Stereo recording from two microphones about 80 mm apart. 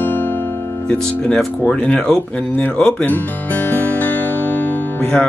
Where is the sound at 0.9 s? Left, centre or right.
Centre.